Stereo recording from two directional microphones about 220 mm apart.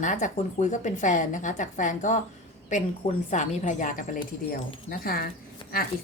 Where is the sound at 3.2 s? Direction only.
35° left (ahead or behind).